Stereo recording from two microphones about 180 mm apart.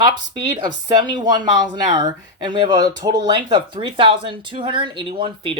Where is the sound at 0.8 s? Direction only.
25° right (ahead or behind).